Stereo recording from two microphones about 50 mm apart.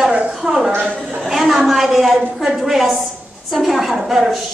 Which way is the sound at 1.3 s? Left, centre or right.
Centre.